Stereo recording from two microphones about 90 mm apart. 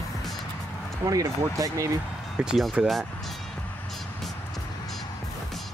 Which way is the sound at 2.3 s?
5° right (ahead or behind).